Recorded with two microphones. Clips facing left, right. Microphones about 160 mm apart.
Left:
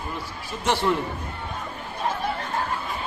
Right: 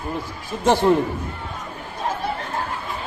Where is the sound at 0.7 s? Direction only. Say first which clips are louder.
Right 6 dB; 45° right (ahead or behind).